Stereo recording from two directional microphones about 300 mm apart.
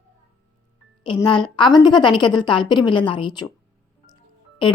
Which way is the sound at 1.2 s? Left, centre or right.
Centre.